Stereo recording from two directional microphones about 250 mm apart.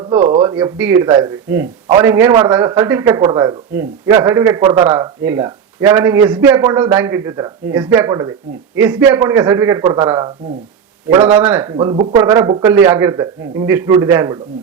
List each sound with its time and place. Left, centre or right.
0.0 s speech: centre
0.5 s a man's voice: centre
11.3 s a man's voice: centre